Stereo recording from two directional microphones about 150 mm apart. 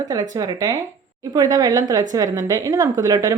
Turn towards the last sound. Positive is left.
turn(degrees=-25)  # may be behind; listen again after turning